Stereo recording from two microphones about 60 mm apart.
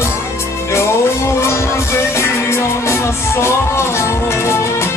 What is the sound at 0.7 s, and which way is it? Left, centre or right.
Music, left.